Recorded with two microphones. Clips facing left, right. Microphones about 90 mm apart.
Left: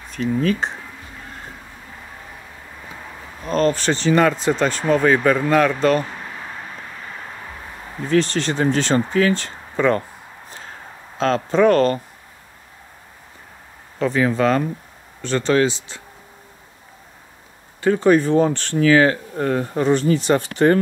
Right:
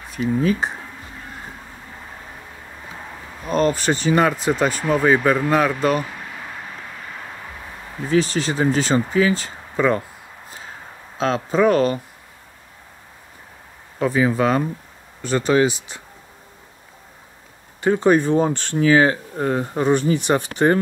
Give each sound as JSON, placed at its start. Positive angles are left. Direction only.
{"t": 0.1, "sound": "speech", "side_deg": -10}
{"t": 3.4, "sound": "speech", "side_deg": -10}
{"t": 8.1, "sound": "speech", "side_deg": -5}
{"t": 11.1, "sound": "speech", "side_deg": -5}
{"t": 13.9, "sound": "speech", "side_deg": -10}
{"t": 17.8, "sound": "speech", "side_deg": -20}